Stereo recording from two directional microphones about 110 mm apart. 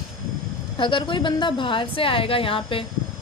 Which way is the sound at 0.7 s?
50° left (ahead or behind).